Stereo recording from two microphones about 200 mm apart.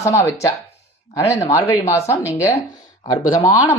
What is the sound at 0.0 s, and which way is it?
Speech, 15° left (ahead or behind).